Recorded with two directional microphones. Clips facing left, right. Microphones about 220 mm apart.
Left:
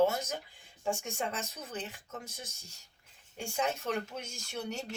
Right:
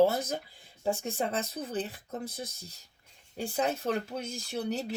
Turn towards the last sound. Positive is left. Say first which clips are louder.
# right 6 dB
turn(degrees=-35)  # may be behind; listen again after turning